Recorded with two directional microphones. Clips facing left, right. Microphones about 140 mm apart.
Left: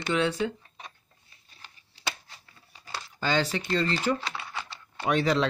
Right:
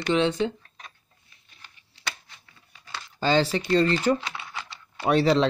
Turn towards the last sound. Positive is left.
turn(degrees=-30)  # may be behind; listen again after turning